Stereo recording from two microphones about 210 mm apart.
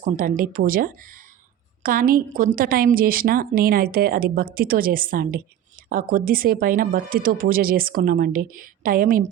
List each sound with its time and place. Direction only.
0.0 s a woman's voice: 40° right (ahead or behind)